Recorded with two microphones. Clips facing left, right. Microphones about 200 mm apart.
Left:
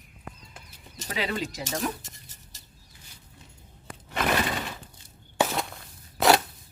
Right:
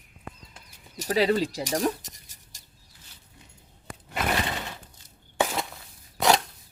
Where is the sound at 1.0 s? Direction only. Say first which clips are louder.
Right 8 dB; 35° right (ahead or behind).